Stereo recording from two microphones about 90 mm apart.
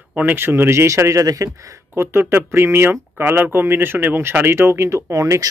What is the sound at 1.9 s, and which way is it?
Speech, 30° right (ahead or behind).